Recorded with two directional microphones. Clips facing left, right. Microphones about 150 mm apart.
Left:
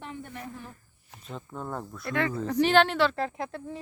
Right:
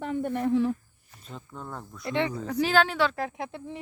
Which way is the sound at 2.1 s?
25° right (ahead or behind).